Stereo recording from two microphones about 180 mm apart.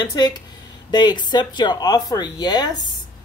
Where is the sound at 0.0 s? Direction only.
25° left (ahead or behind).